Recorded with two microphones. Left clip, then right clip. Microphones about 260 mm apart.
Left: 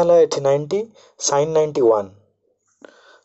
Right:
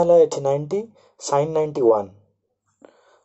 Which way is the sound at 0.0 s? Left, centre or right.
Left.